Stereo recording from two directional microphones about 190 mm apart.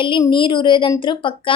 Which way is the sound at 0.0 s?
25° left (ahead or behind).